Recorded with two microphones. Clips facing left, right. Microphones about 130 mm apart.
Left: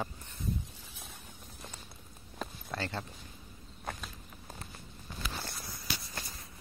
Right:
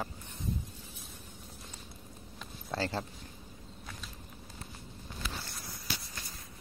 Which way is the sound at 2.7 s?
30° right (ahead or behind).